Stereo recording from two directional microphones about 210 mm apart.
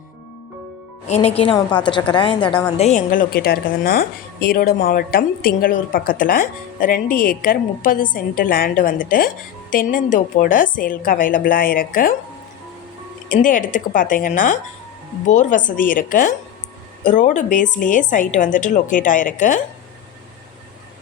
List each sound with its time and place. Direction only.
1.0 s a woman's voice: 30° left (ahead or behind)
2.7 s a woman's voice: 35° left (ahead or behind)
13.3 s a woman's voice: 40° left (ahead or behind)